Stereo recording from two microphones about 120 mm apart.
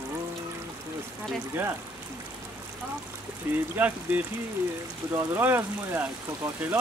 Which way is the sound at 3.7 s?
15° right (ahead or behind).